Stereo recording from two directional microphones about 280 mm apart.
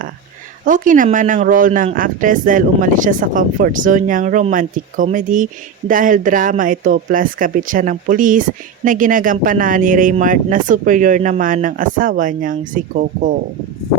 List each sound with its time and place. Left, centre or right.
0.6 s speech: right